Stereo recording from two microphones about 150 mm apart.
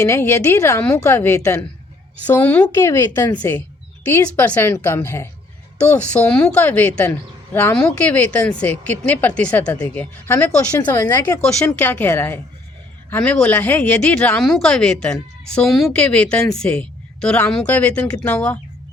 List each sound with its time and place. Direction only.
0.0 s a woman's voice: 15° left (ahead or behind)